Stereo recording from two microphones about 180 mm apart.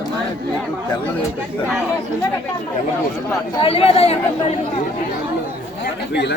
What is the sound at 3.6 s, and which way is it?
Speech, 30° left (ahead or behind).